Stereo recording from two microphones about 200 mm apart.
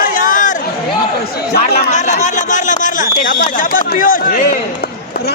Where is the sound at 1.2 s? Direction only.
50° left (ahead or behind).